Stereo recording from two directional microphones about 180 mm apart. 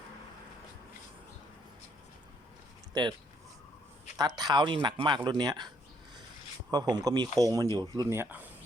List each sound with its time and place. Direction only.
2.9 s speech: 25° right (ahead or behind)
4.2 s speech: 20° right (ahead or behind)